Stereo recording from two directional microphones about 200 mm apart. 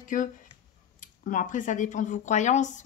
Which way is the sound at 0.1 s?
40° left (ahead or behind).